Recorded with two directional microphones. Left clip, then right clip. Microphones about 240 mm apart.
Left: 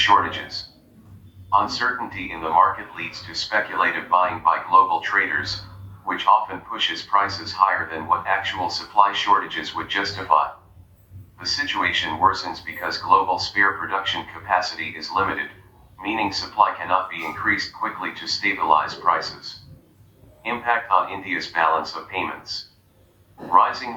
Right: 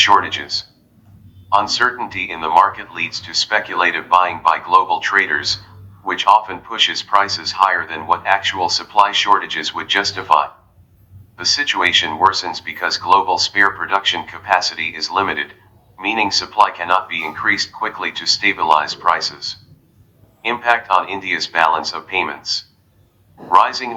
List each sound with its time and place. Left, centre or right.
0.0 s speech: right
11.3 s speech: right